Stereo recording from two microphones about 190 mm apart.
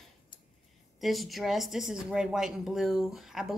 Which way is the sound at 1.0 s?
Centre (ahead or behind).